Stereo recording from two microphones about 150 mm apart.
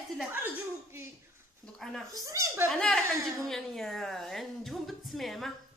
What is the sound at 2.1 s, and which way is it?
Speech, 25° right (ahead or behind).